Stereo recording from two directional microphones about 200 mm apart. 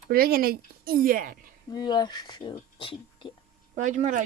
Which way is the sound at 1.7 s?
20° left (ahead or behind).